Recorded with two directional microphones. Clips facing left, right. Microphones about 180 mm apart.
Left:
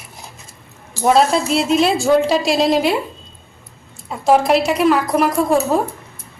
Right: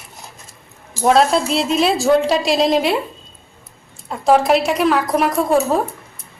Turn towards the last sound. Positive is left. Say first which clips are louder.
# even
turn(degrees=0)  # may be behind; listen again after turning